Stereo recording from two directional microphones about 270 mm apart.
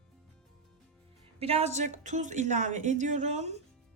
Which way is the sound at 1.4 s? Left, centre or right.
Right.